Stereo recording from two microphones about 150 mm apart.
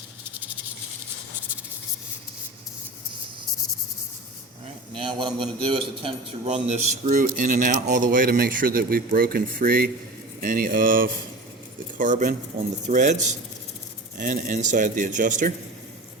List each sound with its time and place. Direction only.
4.9 s a man's voice: 35° right (ahead or behind)
7.1 s a man's voice: 60° right (ahead or behind)